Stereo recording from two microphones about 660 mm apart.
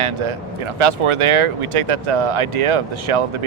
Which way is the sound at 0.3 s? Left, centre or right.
Right.